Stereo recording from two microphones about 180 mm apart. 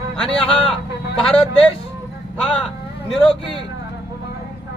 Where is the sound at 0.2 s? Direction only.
5° left (ahead or behind).